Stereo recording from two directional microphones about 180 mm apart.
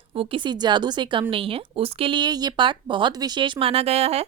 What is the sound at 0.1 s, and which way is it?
A woman's voice, 30° right (ahead or behind).